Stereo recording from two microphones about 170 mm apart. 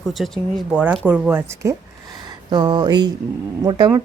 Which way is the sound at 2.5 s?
25° right (ahead or behind).